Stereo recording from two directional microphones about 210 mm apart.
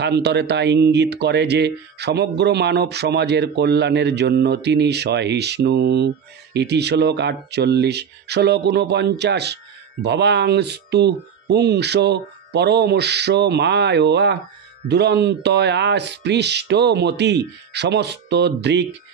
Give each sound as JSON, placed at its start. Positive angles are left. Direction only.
{"t": 0.0, "sound": "speech", "side_deg": -55}